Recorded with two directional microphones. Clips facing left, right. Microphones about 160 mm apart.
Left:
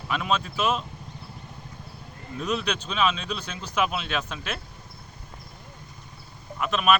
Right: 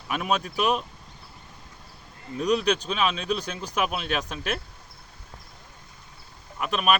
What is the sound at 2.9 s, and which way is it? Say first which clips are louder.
Speech: even; 45° right (ahead or behind).